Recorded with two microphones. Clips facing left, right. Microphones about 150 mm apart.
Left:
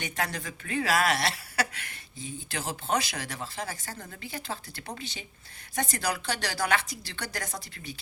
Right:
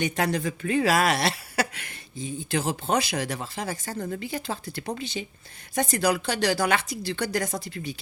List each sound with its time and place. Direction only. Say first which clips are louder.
0.0 s a woman's voice: right 8 dB; 20° right (ahead or behind)